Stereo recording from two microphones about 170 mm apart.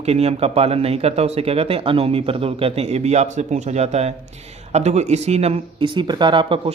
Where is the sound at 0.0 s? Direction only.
40° right (ahead or behind).